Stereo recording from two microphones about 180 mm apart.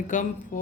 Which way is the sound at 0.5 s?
45° left (ahead or behind).